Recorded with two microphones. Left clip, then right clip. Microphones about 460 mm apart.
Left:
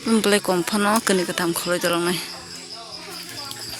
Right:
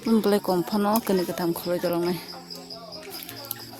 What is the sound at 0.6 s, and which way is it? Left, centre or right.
Speech, right.